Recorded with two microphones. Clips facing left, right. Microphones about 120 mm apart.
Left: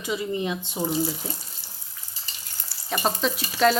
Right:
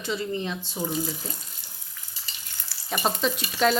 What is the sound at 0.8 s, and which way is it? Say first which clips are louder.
Speech: left 3 dB; 25° left (ahead or behind).